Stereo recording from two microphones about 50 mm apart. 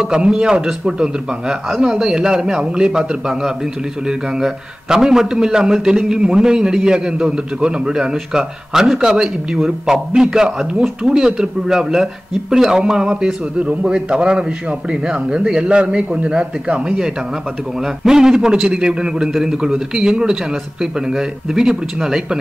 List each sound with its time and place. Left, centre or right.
0.0 s a man's voice: centre